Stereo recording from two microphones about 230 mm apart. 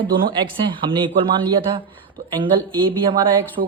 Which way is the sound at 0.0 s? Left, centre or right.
Right.